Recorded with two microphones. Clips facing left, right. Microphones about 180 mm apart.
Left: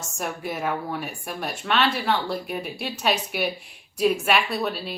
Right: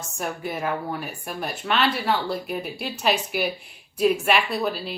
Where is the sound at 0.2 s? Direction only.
Centre (ahead or behind).